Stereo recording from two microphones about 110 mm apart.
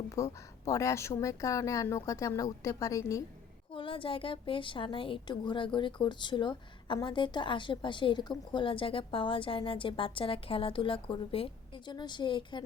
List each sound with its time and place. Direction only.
0.1 s a woman's voice: 30° left (ahead or behind)
3.8 s a woman's voice: 50° left (ahead or behind)